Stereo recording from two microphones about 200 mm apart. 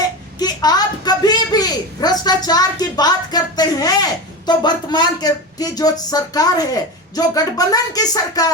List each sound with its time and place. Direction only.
0.3 s speech: 20° left (ahead or behind)